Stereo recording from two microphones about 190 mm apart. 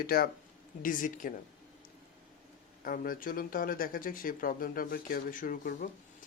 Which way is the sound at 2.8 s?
45° left (ahead or behind).